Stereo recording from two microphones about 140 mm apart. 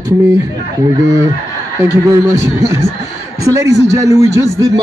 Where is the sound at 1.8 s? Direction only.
20° right (ahead or behind).